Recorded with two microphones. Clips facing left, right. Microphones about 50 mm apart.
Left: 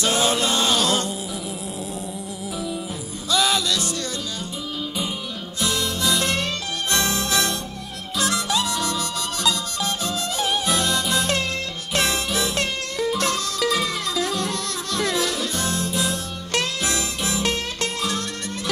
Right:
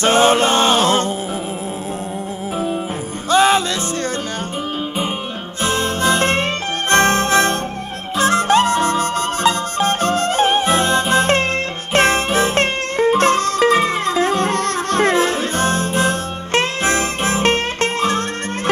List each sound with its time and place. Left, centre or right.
0.0 s music: right
3.3 s music: right
5.6 s music: right